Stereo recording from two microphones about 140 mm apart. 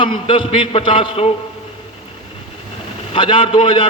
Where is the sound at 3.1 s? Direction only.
35° left (ahead or behind).